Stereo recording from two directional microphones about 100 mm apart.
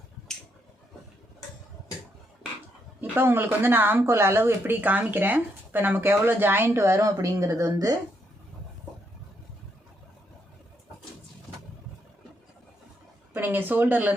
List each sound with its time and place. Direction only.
3.0 s speech: 20° right (ahead or behind); by 7.9 s 35° right (ahead or behind)
13.3 s speech: 20° right (ahead or behind)